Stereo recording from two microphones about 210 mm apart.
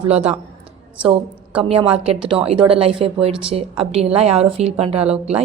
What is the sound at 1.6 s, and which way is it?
A woman's voice, 25° right (ahead or behind).